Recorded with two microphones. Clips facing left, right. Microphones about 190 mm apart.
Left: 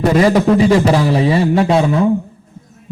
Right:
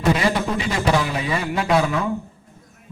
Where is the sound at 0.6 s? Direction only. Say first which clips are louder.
Left 9 dB; 35° left (ahead or behind).